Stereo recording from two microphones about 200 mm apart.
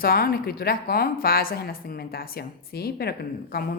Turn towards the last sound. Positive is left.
turn(degrees=50)  # may be behind; listen again after turning